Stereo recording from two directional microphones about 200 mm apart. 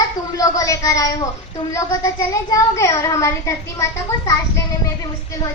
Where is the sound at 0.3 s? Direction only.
15° left (ahead or behind).